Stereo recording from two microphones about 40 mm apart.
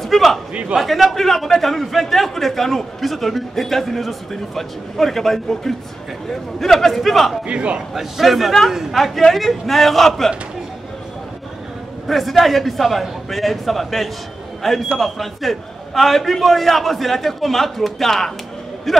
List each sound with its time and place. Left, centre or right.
0.0 s a sound: centre
0.7 s a man's voice: centre
7.4 s a man's voice: right
7.9 s a man's voice: centre
12.1 s a man's voice: centre